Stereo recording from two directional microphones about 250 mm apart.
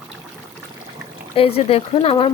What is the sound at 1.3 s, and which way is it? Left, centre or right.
Speech, left.